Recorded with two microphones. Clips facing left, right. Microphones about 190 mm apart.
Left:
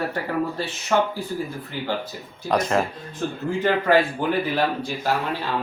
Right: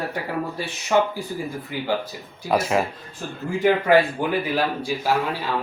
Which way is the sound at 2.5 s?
5° right (ahead or behind).